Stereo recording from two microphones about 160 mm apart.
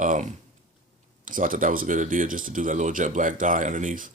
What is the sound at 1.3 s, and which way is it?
Speech, 55° right (ahead or behind).